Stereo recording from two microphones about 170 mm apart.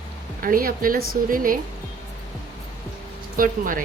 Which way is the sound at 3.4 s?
55° right (ahead or behind).